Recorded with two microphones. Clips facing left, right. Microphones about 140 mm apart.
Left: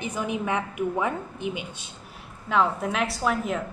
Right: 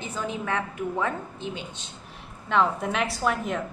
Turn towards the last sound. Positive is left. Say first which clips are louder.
# left 1 dB
turn(degrees=0)  # may be behind; listen again after turning